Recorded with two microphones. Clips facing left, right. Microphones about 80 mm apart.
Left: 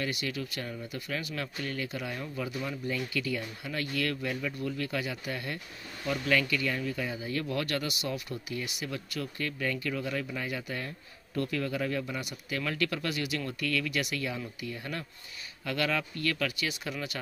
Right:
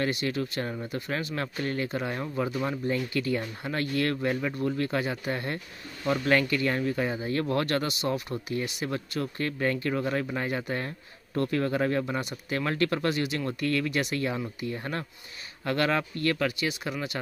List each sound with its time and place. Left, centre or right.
0.0 s speech: right